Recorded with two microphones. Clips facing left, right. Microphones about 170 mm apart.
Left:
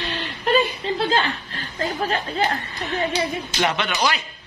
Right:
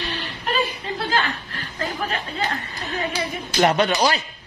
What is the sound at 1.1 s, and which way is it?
Chuckle, 30° left (ahead or behind).